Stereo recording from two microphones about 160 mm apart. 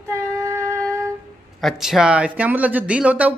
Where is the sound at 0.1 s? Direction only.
15° right (ahead or behind).